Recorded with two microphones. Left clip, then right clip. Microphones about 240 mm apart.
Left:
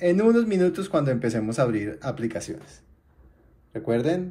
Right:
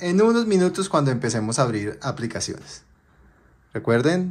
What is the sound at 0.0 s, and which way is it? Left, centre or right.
Speech, centre.